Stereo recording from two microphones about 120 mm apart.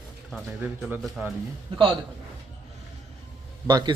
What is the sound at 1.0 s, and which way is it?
Speech, centre (ahead or behind).